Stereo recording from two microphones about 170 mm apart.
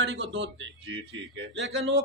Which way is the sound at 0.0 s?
90° right.